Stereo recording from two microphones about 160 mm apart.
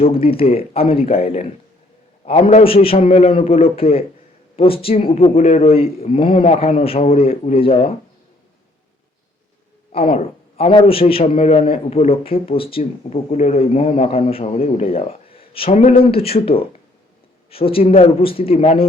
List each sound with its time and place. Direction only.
0.0 s speech: 35° left (ahead or behind)
9.9 s a man's voice: 35° left (ahead or behind)
17.5 s speech: 35° left (ahead or behind)